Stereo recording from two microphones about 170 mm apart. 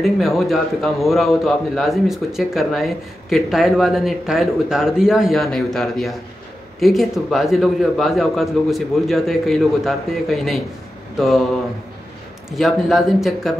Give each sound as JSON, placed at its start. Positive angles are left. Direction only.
{"t": 0.0, "sound": "a man's voice", "side_deg": 0}
{"t": 12.4, "sound": "a man's voice", "side_deg": 0}